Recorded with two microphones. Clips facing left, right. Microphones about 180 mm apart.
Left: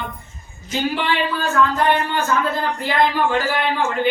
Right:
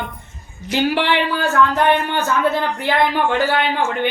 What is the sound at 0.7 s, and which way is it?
Music, 70° right (ahead or behind).